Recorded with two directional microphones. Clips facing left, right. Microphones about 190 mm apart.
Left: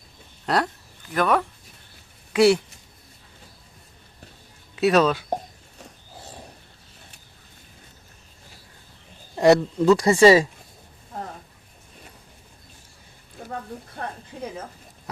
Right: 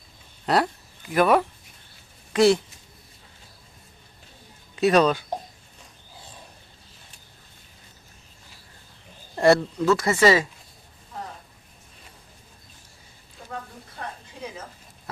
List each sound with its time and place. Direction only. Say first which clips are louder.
0.4 s speech: right 1 dB; 5° right (ahead or behind)
2.3 s speech: left 1 dB; 10° left (ahead or behind)
4.8 s speech: even; 5° left (ahead or behind)
9.3 s speech: left 2 dB; 15° left (ahead or behind)
10.1 s speech: left 6 dB; 30° left (ahead or behind)
11.1 s a sound: left 2 dB; 50° left (ahead or behind)
13.4 s a sound: left 4 dB; 55° left (ahead or behind)
14.0 s a woman's voice: left 3 dB; 55° left (ahead or behind)